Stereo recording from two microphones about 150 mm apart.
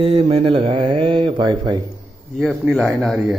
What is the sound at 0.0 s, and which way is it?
Speech, 40° right (ahead or behind).